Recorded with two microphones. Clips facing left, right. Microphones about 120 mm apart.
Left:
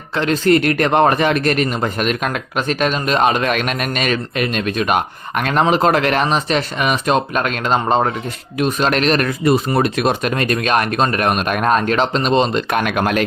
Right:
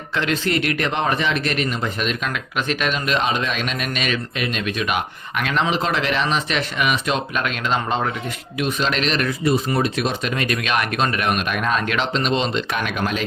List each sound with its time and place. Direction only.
0.2 s speech: 40° left (ahead or behind); by 13.2 s 60° left (ahead or behind)